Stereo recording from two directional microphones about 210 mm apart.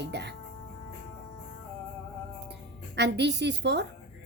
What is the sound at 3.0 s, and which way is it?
Speech, 55° right (ahead or behind).